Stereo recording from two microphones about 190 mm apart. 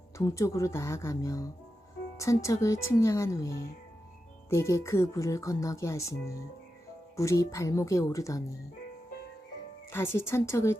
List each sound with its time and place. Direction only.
0.2 s speech: 15° left (ahead or behind)
9.9 s speech: 10° left (ahead or behind)